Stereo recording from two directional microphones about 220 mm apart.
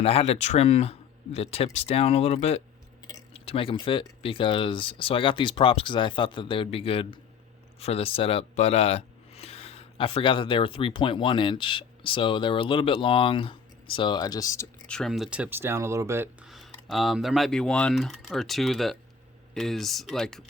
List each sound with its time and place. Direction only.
0.0 s speech: 25° left (ahead or behind); by 20.4 s centre (ahead or behind)